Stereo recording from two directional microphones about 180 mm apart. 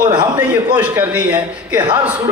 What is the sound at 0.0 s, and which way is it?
Speech, 25° right (ahead or behind).